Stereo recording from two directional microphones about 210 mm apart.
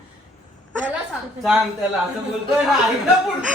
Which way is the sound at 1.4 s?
5° right (ahead or behind).